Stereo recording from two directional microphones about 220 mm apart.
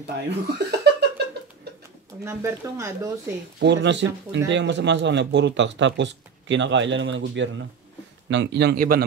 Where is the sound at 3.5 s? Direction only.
50° right (ahead or behind).